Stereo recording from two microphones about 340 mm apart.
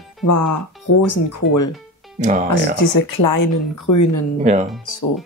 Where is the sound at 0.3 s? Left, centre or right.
Left.